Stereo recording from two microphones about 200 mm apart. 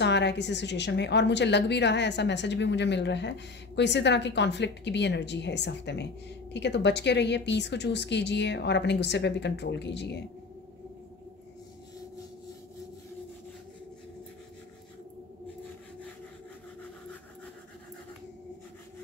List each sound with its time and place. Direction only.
0.0 s a woman's voice: 60° left (ahead or behind)